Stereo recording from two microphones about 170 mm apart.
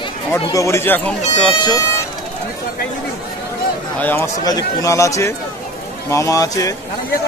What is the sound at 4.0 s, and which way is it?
A man's voice, 10° left (ahead or behind).